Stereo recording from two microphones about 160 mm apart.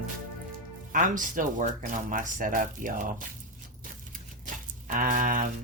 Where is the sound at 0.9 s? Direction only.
55° right (ahead or behind).